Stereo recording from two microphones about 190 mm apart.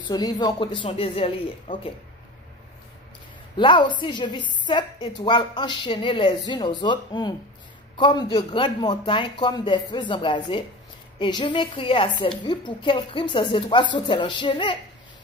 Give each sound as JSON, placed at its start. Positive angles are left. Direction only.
{"t": 0.1, "sound": "a woman's voice", "side_deg": 20}
{"t": 3.5, "sound": "a woman's voice", "side_deg": 25}